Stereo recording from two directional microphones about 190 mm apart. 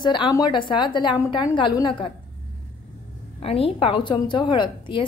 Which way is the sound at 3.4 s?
30° left (ahead or behind).